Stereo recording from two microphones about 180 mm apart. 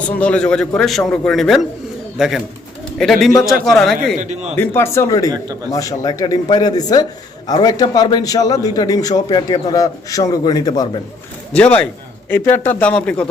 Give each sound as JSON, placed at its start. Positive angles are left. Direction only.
{"t": 0.2, "sound": "a man's voice", "side_deg": 5}
{"t": 4.2, "sound": "a man's voice", "side_deg": -40}
{"t": 4.6, "sound": "a man's voice", "side_deg": 10}
{"t": 11.5, "sound": "speech", "side_deg": 5}